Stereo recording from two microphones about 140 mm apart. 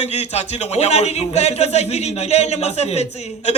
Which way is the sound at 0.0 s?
50° left (ahead or behind).